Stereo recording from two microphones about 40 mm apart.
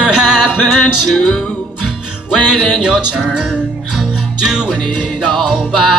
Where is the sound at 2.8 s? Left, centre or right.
Centre.